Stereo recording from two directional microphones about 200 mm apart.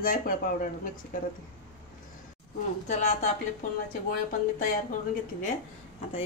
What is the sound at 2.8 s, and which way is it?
Speech, 35° left (ahead or behind).